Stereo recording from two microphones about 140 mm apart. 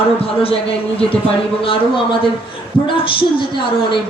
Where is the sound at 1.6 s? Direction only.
40° left (ahead or behind).